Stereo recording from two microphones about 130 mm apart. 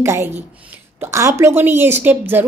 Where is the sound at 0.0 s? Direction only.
20° right (ahead or behind).